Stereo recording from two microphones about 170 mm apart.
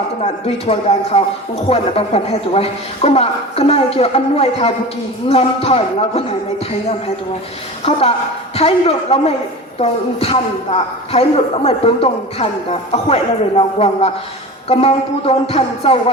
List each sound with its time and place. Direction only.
0.2 s a woman's voice: 35° left (ahead or behind)
7.9 s a woman's voice: 35° left (ahead or behind)
13.6 s a woman's voice: 35° left (ahead or behind)